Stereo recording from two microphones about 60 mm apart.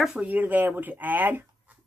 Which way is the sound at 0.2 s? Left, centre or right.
Right.